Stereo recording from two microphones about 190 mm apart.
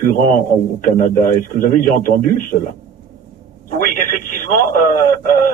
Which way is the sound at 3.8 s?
45° left (ahead or behind).